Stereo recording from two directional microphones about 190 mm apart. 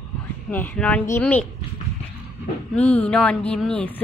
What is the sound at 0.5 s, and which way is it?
Speech, 10° left (ahead or behind).